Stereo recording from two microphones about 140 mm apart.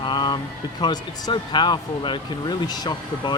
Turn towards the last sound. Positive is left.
turn(degrees=30)  # may be behind; listen again after turning